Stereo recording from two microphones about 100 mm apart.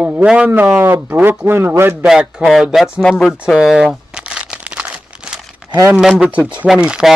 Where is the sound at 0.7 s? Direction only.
25° right (ahead or behind).